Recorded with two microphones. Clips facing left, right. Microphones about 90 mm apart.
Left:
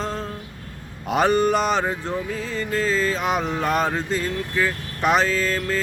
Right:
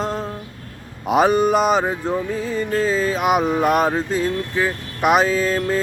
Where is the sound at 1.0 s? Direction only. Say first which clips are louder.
Right 3 dB; 5° right (ahead or behind).